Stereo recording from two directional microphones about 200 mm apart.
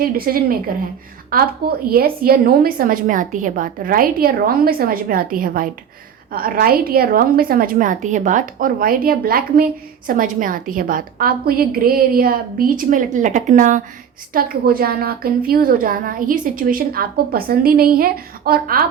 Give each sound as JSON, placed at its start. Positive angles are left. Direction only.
{"t": 0.0, "sound": "a woman's voice", "side_deg": -50}